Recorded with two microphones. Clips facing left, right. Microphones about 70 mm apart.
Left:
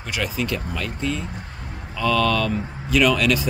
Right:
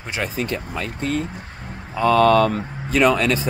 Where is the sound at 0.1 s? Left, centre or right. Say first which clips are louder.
Right 1 dB; right.